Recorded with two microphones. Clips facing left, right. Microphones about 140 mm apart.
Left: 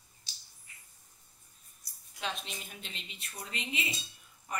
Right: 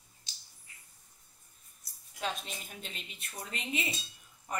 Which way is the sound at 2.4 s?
50° right (ahead or behind).